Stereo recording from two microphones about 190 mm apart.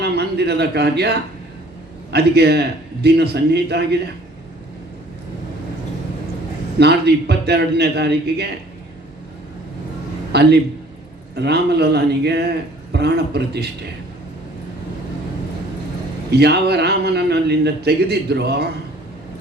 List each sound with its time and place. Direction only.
0.0 s a man's voice: 60° right (ahead or behind)
6.7 s a man's voice: 60° right (ahead or behind)
10.3 s a man's voice: 60° right (ahead or behind)
16.3 s a man's voice: 60° right (ahead or behind)